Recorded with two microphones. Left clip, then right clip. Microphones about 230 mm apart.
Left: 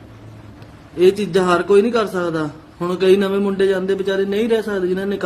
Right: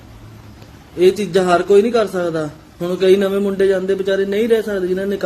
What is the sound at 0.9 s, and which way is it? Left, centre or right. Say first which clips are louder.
A man's voice: right 1 dB; centre.